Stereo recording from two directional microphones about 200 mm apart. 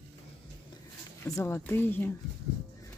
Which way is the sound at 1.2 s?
10° left (ahead or behind).